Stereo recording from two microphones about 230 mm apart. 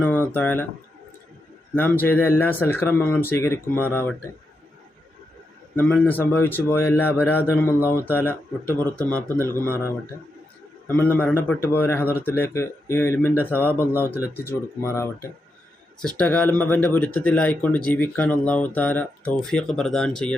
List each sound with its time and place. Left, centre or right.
0.0 s speech: centre
1.7 s speech: centre
5.7 s speech: centre